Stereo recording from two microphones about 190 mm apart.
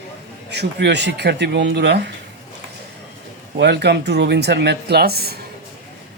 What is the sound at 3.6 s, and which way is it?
Speech, 60° right (ahead or behind).